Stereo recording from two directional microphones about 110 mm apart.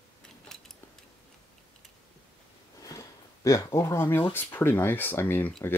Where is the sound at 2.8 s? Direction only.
30° left (ahead or behind).